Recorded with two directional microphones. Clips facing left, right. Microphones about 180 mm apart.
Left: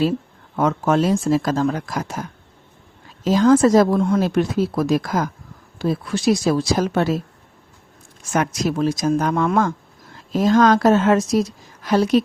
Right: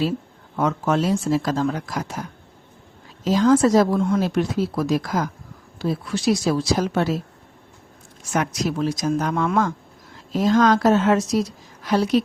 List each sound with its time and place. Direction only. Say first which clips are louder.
0.5 s speech: left 3 dB; 50° left (ahead or behind)
3.2 s speech: left 2 dB; 50° left (ahead or behind)
8.3 s speech: left 2 dB; 50° left (ahead or behind)